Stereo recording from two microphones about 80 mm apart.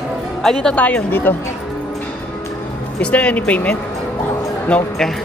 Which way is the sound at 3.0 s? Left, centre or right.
Centre.